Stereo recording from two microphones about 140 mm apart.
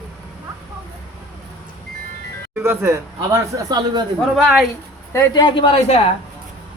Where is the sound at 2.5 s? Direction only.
15° right (ahead or behind).